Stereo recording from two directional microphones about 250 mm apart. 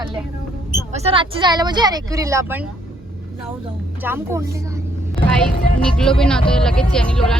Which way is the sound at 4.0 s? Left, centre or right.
Centre.